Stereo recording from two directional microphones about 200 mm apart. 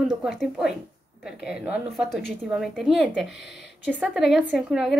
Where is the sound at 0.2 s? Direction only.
5° right (ahead or behind).